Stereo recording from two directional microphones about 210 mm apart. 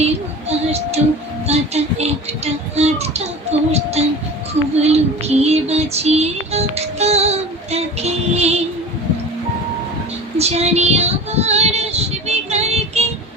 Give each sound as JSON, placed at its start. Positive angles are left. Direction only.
{"t": 0.0, "sound": "a sound", "side_deg": -30}
{"t": 1.5, "sound": "music", "side_deg": -30}
{"t": 3.7, "sound": "speech", "side_deg": -30}
{"t": 4.8, "sound": "music", "side_deg": -30}
{"t": 10.3, "sound": "child singing", "side_deg": -30}